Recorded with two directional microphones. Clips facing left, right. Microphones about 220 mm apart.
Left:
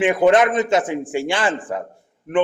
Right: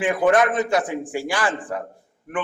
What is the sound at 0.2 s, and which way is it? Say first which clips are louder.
A man's voice: left 2 dB; 20° left (ahead or behind).